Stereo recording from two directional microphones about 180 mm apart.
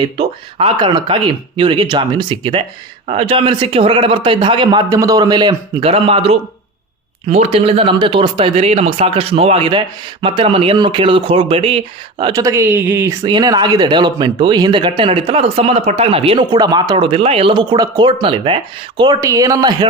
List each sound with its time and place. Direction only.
0.2 s speech: 30° right (ahead or behind)
12.2 s speech: 20° right (ahead or behind)